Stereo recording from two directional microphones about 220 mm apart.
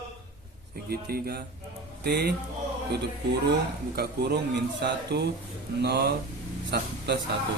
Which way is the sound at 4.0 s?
50° right (ahead or behind).